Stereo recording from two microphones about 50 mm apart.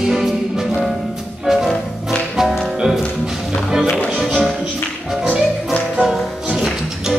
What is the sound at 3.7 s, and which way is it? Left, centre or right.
Music, centre.